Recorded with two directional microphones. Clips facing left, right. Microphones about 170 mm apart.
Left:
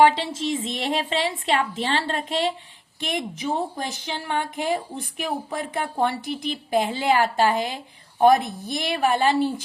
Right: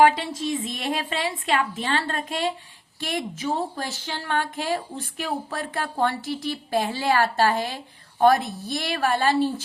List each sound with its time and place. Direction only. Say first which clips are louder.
0.0 s a woman's voice: left 1 dB; 25° left (ahead or behind)